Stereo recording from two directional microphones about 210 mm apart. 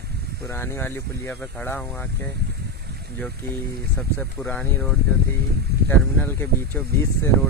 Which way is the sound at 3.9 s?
10° left (ahead or behind).